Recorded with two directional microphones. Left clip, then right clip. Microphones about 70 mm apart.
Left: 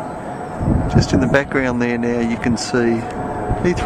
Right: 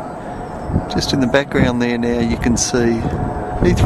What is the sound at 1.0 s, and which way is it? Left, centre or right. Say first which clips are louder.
Speech: right 1 dB; right.